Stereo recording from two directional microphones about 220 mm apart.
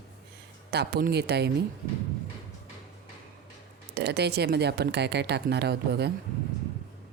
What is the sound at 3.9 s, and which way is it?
A woman's voice, 50° right (ahead or behind).